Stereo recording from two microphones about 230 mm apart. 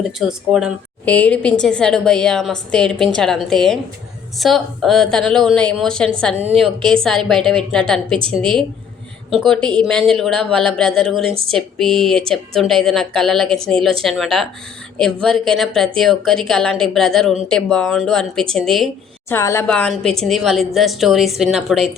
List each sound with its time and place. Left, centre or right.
0.0 s a woman's voice: centre
6.3 s a woman's voice: right
6.6 s a woman's voice: centre
8.2 s a woman's voice: right
9.4 s a woman's voice: centre